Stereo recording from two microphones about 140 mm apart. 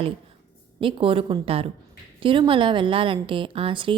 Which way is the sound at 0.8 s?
40° right (ahead or behind).